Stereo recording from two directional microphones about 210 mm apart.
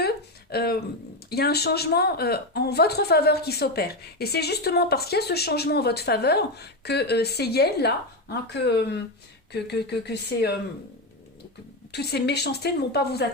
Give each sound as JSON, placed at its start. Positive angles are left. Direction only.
{"t": 0.0, "sound": "a sound", "side_deg": 50}
{"t": 1.3, "sound": "a woman's voice", "side_deg": 50}
{"t": 11.9, "sound": "a woman's voice", "side_deg": 50}